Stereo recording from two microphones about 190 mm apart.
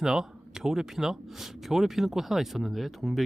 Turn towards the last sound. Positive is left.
turn(degrees=0)  # may be behind; listen again after turning